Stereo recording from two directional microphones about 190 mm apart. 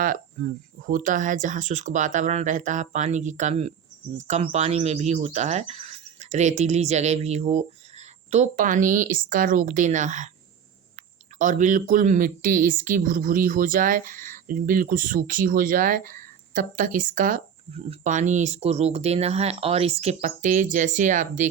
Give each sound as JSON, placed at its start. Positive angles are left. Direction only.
{"t": 0.9, "sound": "speech", "side_deg": -45}